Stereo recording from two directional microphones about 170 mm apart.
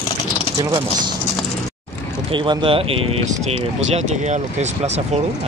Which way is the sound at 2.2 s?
30° right (ahead or behind).